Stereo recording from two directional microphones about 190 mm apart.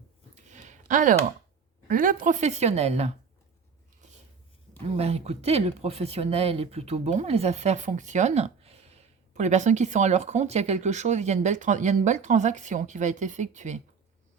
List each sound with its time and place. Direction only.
0.3 s a sound: 35° right (ahead or behind)
1.9 s speech: 45° right (ahead or behind)
4.9 s speech: 35° right (ahead or behind)